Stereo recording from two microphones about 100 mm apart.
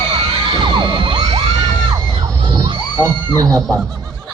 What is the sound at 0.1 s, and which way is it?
Music, 50° right (ahead or behind).